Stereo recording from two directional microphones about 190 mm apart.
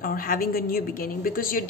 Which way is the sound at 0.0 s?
50° left (ahead or behind).